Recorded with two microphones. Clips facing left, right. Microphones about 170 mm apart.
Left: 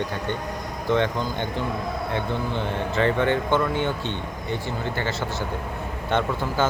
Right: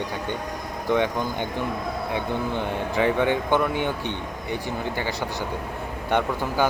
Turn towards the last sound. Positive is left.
turn(degrees=-15)  # may be behind; listen again after turning